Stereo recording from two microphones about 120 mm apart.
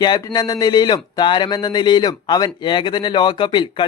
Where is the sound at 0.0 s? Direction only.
35° left (ahead or behind).